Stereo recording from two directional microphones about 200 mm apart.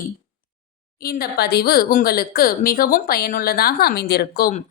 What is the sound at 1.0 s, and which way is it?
A woman's voice, 50° left (ahead or behind).